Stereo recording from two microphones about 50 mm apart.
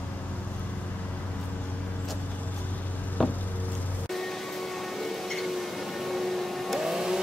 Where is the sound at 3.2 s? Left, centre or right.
Centre.